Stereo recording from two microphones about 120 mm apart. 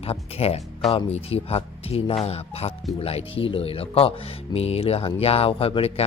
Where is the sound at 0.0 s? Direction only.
55° left (ahead or behind).